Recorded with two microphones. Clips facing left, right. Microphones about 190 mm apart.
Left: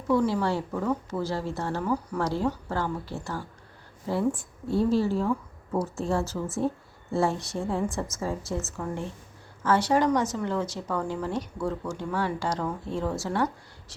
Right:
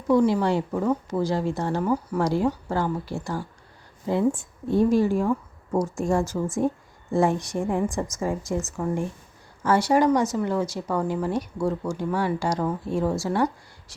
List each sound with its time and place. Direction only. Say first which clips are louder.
0.1 s a woman's voice: right 4 dB; 15° right (ahead or behind)